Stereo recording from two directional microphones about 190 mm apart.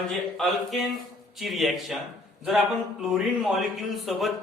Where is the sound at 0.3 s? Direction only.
Centre (ahead or behind).